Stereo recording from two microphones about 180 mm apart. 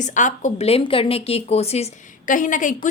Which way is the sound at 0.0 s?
45° left (ahead or behind).